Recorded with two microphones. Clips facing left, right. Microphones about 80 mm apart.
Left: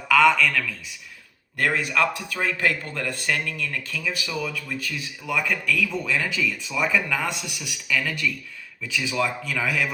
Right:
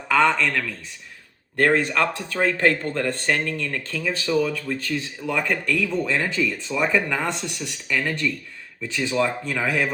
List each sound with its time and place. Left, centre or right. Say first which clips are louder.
0.1 s speech: left 1 dB; right